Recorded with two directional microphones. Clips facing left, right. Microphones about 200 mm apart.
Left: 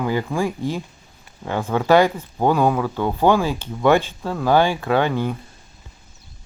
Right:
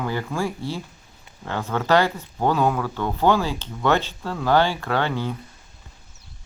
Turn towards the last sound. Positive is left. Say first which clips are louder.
# left 5 dB
turn(degrees=15)  # may be behind; listen again after turning